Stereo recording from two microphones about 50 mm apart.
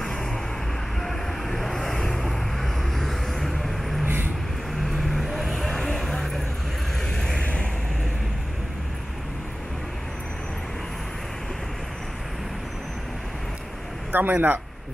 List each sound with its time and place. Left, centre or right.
1.0 s vehicle: centre
4.0 s vehicle: right
4.9 s vehicle: centre
14.1 s speech: right